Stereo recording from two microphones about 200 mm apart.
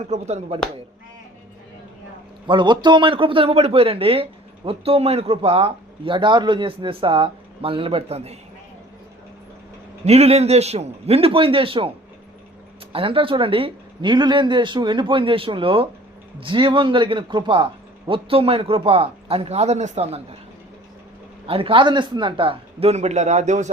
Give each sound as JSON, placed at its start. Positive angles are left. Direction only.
{"t": 0.0, "sound": "a man's voice", "side_deg": -35}
{"t": 2.5, "sound": "a man's voice", "side_deg": -25}
{"t": 10.1, "sound": "a man's voice", "side_deg": -30}
{"t": 12.9, "sound": "a man's voice", "side_deg": -25}
{"t": 21.4, "sound": "a man's voice", "side_deg": -25}